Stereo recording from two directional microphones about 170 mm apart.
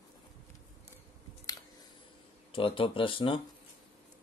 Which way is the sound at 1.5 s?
20° left (ahead or behind).